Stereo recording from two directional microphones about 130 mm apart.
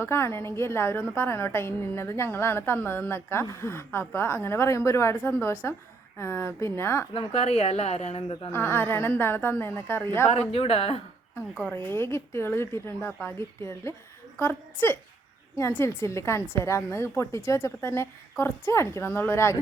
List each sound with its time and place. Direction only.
0.0 s speech: 20° left (ahead or behind)
7.1 s speech: 45° left (ahead or behind)
8.5 s a woman's voice: 20° left (ahead or behind)
10.5 s speech: 50° left (ahead or behind)
11.7 s a woman's voice: 15° left (ahead or behind)